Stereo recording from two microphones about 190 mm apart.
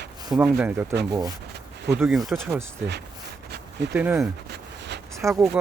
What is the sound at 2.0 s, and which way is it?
Speech, centre (ahead or behind).